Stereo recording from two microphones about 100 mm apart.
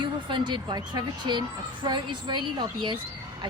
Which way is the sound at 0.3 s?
50° right (ahead or behind).